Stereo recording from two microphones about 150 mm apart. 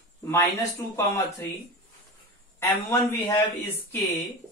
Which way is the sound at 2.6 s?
15° left (ahead or behind).